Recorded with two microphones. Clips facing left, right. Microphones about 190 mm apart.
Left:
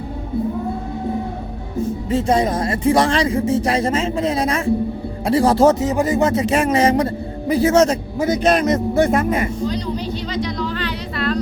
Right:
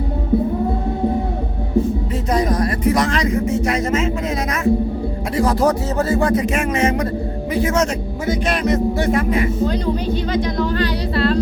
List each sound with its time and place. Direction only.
2.1 s a man's voice: 25° left (ahead or behind); by 9.5 s 50° left (ahead or behind)
9.6 s a woman's voice: 55° right (ahead or behind); by 11.3 s 35° right (ahead or behind)